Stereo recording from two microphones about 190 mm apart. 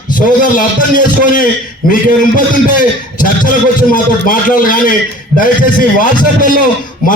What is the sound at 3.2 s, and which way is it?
A man's voice, 45° left (ahead or behind).